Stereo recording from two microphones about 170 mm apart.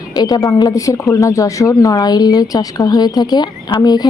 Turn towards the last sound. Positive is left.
turn(degrees=25)  # may be behind; listen again after turning